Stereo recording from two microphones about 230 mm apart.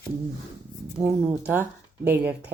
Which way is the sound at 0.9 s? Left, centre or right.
Centre.